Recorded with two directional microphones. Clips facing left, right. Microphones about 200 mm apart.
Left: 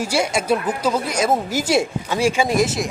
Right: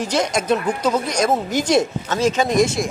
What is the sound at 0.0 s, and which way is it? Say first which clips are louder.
A woman's voice: even; 10° left (ahead or behind).